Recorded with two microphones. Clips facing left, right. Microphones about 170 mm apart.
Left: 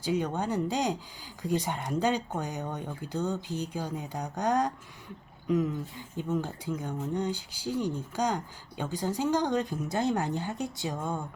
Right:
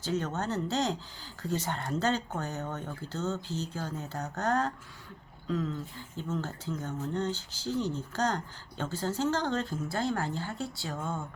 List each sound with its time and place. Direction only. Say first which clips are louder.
0.0 s speech: left 3 dB; 10° left (ahead or behind)